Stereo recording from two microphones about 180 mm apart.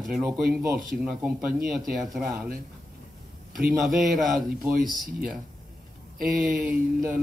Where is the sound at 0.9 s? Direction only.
60° right (ahead or behind).